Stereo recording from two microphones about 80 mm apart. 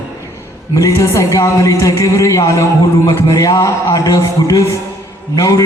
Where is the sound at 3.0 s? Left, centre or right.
Left.